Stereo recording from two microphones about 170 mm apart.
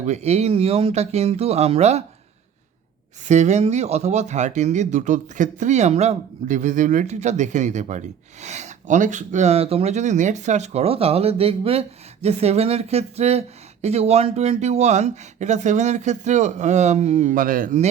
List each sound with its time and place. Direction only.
0.0 s speech: 40° right (ahead or behind)
3.2 s speech: 45° right (ahead or behind)